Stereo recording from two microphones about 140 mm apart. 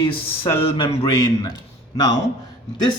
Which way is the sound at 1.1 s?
25° left (ahead or behind).